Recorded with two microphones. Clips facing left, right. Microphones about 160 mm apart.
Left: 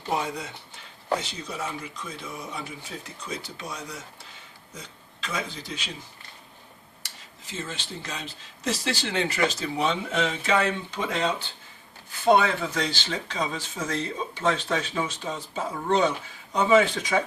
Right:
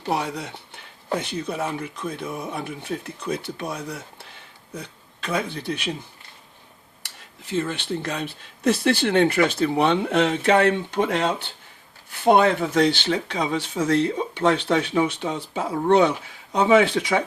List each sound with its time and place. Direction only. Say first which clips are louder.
0.1 s speech: right 3 dB; 70° right (ahead or behind)
7.5 s speech: right 10 dB; 60° right (ahead or behind)